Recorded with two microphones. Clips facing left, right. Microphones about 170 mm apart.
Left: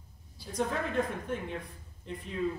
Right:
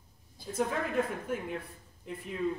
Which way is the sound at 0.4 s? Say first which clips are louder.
Right 3 dB; 50° right (ahead or behind).